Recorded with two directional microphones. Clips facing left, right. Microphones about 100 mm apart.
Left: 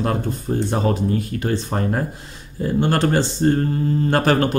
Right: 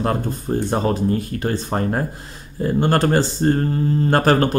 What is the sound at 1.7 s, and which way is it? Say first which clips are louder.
Speech: right 4 dB; 30° right (ahead or behind).